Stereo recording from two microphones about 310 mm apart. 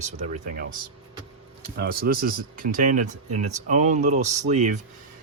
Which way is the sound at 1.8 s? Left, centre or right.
Right.